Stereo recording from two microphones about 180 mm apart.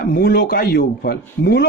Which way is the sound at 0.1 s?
55° left (ahead or behind).